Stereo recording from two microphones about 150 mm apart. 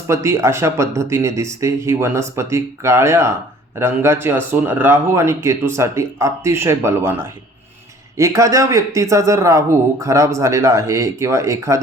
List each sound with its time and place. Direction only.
0.1 s speech: 20° right (ahead or behind)